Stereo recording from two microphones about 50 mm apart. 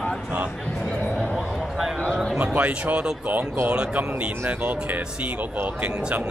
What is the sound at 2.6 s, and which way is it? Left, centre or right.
Speech, right.